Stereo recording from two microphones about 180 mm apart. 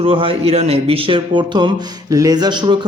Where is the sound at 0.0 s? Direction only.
30° right (ahead or behind).